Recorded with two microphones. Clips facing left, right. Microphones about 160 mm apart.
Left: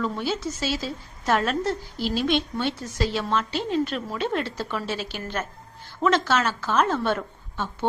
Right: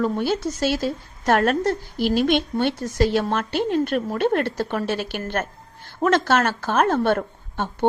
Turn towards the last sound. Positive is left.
turn(degrees=-55)  # may be behind; listen again after turning